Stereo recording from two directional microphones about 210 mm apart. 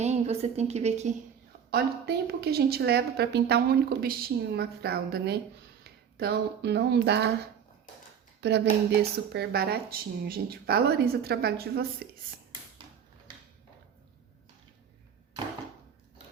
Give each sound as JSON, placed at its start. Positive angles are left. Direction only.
{"t": 0.0, "sound": "a woman's voice", "side_deg": -30}
{"t": 1.7, "sound": "speech", "side_deg": -50}
{"t": 8.4, "sound": "speech", "side_deg": -55}